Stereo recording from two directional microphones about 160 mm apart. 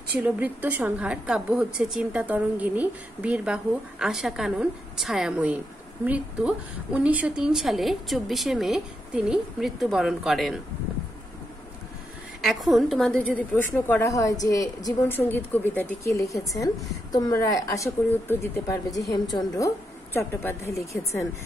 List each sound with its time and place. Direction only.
0.2 s a woman's voice: 10° right (ahead or behind)
12.4 s a woman's voice: centre (ahead or behind); by 21.3 s 20° left (ahead or behind)